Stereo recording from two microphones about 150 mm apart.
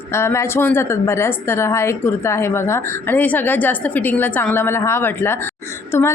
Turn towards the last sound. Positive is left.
turn(degrees=15)  # may be behind; listen again after turning